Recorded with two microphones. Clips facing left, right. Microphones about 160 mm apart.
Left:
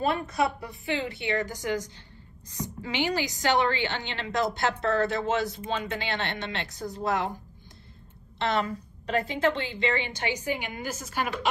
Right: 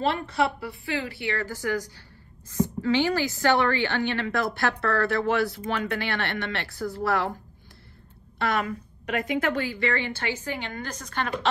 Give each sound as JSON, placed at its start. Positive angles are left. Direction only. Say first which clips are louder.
{"t": 0.6, "sound": "a woman's voice", "louder": "even", "side_deg": 20}
{"t": 8.4, "sound": "a woman's voice", "louder": "right 1 dB", "side_deg": 30}